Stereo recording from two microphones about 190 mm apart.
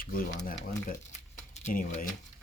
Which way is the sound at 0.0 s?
50° left (ahead or behind).